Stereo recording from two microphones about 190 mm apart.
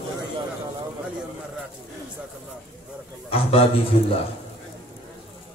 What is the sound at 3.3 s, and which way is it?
Speech, 30° left (ahead or behind).